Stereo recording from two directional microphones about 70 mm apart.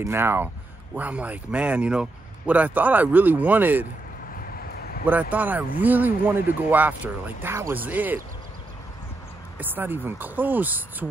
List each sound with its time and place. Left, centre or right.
0.0 s speech: right
0.9 s speech: right
5.0 s speech: right
9.6 s speech: right